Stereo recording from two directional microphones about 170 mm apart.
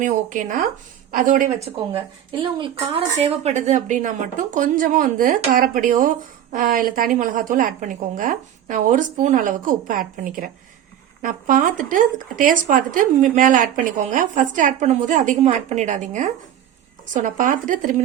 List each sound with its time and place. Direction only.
0.0 s speech: 50° right (ahead or behind)
2.4 s a woman's voice: 30° right (ahead or behind)
3.4 s speech: 45° right (ahead or behind)